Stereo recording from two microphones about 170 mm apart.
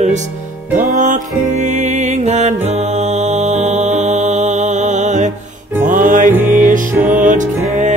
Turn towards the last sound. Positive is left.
turn(degrees=-50)  # may be behind; listen again after turning